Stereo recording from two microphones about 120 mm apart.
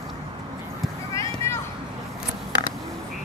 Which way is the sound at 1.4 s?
25° left (ahead or behind).